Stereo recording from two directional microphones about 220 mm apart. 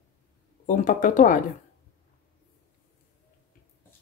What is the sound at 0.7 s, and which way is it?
Speech, 35° left (ahead or behind).